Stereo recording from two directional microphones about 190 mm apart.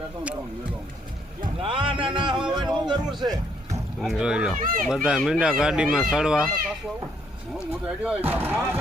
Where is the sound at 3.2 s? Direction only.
20° right (ahead or behind).